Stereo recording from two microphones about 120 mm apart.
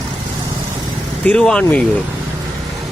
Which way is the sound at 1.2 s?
10° left (ahead or behind).